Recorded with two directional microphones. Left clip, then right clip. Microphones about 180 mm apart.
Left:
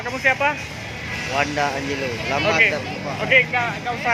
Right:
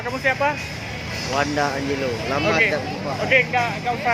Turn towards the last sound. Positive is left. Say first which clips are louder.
# right 1 dB
turn(degrees=0)  # may be behind; listen again after turning